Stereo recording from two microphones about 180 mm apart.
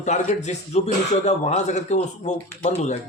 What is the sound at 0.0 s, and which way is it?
Speech, 40° left (ahead or behind).